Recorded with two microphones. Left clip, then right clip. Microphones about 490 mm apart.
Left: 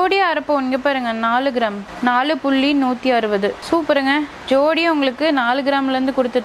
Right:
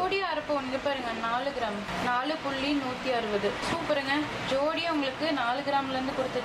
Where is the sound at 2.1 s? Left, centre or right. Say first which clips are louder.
Left 14 dB; left.